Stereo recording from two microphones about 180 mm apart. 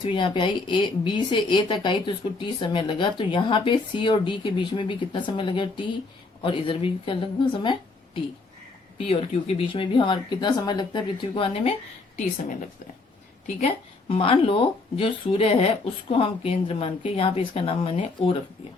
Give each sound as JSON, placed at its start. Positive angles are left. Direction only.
{"t": 0.0, "sound": "speech", "side_deg": 30}
{"t": 14.1, "sound": "speech", "side_deg": 30}